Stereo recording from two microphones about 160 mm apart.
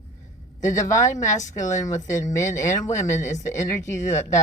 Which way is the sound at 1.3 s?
50° left (ahead or behind).